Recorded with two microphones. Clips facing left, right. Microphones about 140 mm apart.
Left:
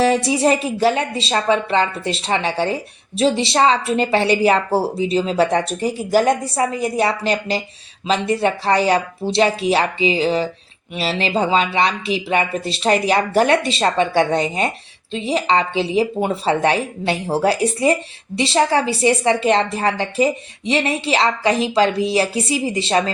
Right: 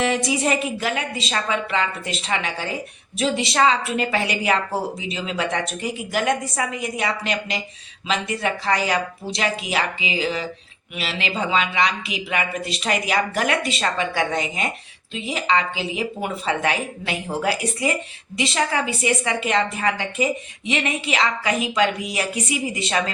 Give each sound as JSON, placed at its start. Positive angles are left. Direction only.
{"t": 0.0, "sound": "a woman's voice", "side_deg": 30}